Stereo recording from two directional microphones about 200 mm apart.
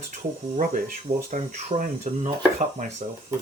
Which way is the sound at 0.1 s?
40° right (ahead or behind).